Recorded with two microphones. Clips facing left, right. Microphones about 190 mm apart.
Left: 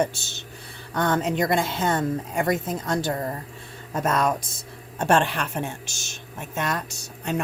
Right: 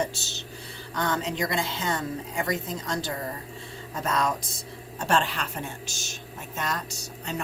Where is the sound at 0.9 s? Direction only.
55° left (ahead or behind).